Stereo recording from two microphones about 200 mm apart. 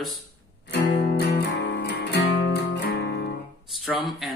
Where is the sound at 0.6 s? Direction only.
45° left (ahead or behind).